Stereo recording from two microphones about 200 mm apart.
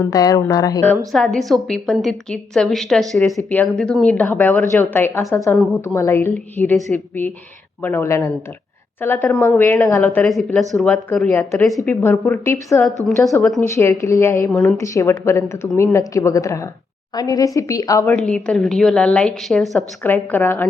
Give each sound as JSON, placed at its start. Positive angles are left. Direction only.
{"t": 0.0, "sound": "speech", "side_deg": 15}
{"t": 0.9, "sound": "a woman's voice", "side_deg": 0}
{"t": 18.1, "sound": "a woman's voice", "side_deg": 5}